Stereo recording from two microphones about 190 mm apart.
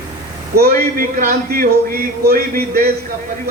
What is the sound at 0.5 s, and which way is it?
A man's voice, 50° right (ahead or behind).